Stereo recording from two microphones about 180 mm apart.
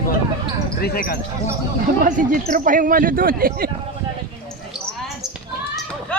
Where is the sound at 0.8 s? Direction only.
55° left (ahead or behind).